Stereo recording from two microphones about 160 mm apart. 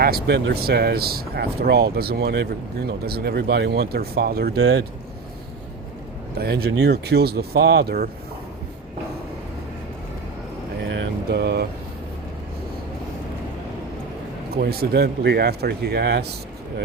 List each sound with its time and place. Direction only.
0.0 s speech: 80° right
6.4 s speech: 80° right
11.3 s speech: 90° right
14.5 s speech: 75° right (ahead or behind); by 16.3 s 90° right